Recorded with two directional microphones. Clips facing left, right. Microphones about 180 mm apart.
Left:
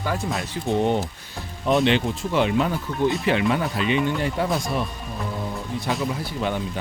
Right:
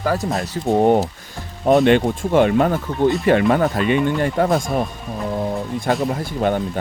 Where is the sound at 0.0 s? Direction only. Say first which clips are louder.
Right 6 dB; 40° right (ahead or behind).